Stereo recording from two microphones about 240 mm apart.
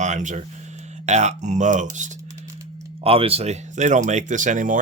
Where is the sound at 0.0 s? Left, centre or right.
Right.